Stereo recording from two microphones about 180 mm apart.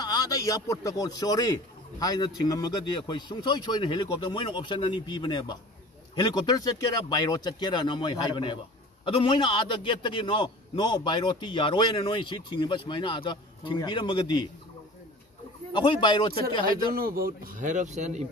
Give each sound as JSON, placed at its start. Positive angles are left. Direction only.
{"t": 0.0, "sound": "speech", "side_deg": 20}
{"t": 15.7, "sound": "speech", "side_deg": 25}
{"t": 16.9, "sound": "speech", "side_deg": -55}